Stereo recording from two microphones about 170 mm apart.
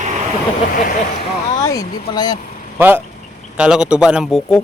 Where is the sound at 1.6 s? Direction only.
20° left (ahead or behind).